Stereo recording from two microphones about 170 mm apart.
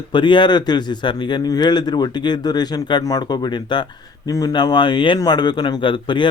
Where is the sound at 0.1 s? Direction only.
25° left (ahead or behind).